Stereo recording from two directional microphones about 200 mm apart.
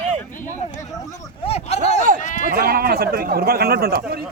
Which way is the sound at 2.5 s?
45° right (ahead or behind).